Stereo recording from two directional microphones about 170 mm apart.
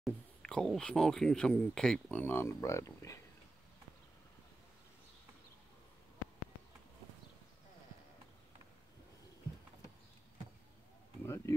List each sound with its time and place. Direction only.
0.0 s speech: 5° left (ahead or behind)
11.2 s speech: 15° left (ahead or behind)